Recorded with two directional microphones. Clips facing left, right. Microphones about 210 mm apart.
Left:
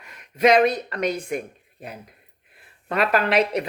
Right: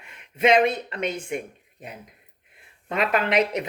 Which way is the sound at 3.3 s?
30° left (ahead or behind).